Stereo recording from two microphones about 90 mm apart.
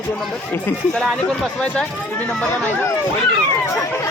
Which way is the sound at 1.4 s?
10° left (ahead or behind).